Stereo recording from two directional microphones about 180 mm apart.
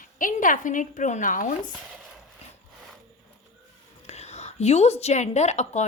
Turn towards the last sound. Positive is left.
turn(degrees=40)  # may be behind; listen again after turning